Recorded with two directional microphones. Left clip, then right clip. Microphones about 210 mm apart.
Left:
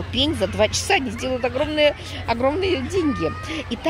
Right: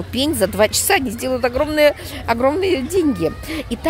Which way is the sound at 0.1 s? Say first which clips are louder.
Right 3 dB; 20° right (ahead or behind).